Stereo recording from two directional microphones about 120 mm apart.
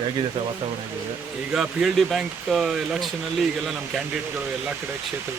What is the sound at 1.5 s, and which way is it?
Speech, centre (ahead or behind).